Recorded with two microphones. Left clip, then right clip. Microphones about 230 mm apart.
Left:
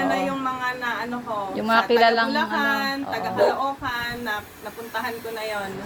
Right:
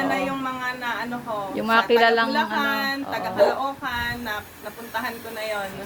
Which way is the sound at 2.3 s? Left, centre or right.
Right.